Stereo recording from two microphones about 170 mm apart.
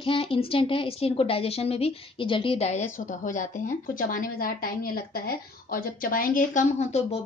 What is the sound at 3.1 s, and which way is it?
A woman's voice, 50° left (ahead or behind).